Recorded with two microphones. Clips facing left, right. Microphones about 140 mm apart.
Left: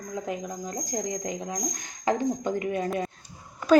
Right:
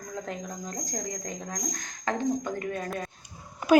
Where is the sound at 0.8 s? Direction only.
15° left (ahead or behind).